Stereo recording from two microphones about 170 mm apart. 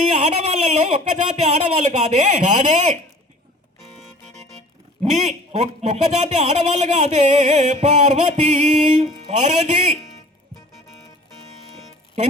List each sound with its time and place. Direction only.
0.1 s speech: 40° right (ahead or behind)
5.2 s speech: 40° right (ahead or behind)